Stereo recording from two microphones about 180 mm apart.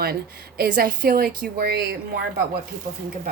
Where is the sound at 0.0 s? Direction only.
60° right (ahead or behind).